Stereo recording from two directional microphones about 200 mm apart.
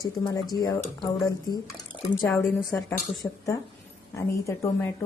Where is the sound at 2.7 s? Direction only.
15° left (ahead or behind).